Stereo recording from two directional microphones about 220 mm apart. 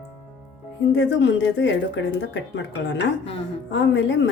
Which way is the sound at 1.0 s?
55° left (ahead or behind).